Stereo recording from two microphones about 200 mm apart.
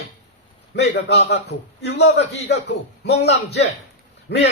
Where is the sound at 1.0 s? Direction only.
55° left (ahead or behind).